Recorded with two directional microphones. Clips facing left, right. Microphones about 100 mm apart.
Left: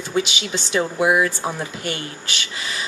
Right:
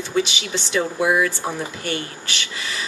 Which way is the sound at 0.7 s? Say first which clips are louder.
Left 1 dB; 20° left (ahead or behind).